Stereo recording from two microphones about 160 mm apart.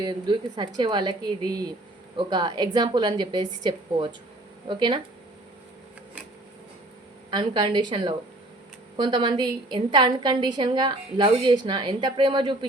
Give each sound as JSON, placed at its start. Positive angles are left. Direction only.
{"t": 0.0, "sound": "a woman's voice", "side_deg": -30}
{"t": 7.3, "sound": "a woman's voice", "side_deg": -30}